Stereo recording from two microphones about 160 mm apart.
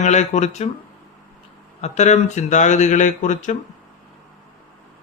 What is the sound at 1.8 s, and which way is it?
Speech, 45° left (ahead or behind).